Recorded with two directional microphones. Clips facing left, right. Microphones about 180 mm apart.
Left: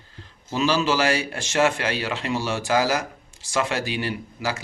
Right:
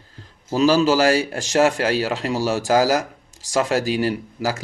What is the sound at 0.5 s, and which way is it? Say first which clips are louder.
Speech: right 6 dB; 40° right (ahead or behind).